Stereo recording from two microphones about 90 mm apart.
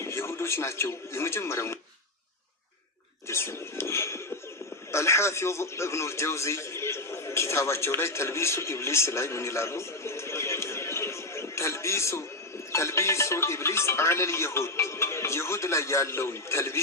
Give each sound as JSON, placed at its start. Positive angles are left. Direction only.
{"t": 0.0, "sound": "speech", "side_deg": 30}
{"t": 3.2, "sound": "a sound", "side_deg": 30}
{"t": 4.9, "sound": "a man's voice", "side_deg": 30}